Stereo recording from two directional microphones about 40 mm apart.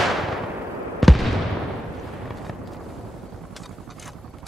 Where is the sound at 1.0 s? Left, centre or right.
Centre.